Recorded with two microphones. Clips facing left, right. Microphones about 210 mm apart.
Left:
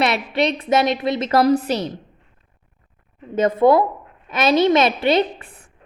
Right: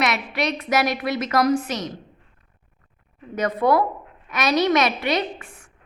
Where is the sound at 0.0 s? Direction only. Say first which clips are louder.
Left 4 dB; 30° left (ahead or behind).